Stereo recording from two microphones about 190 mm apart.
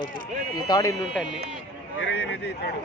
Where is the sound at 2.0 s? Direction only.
65° left (ahead or behind).